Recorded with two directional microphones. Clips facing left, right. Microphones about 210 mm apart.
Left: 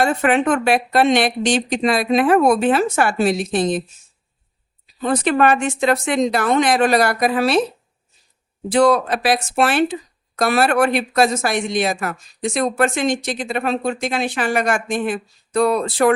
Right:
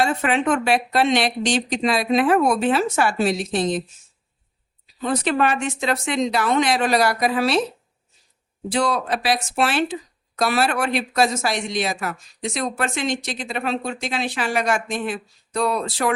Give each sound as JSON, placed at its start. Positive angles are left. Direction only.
{"t": 0.0, "sound": "speech", "side_deg": 55}
{"t": 5.0, "sound": "speech", "side_deg": 50}
{"t": 8.7, "sound": "speech", "side_deg": 55}